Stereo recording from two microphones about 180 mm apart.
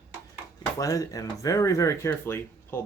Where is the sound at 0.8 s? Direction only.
20° left (ahead or behind).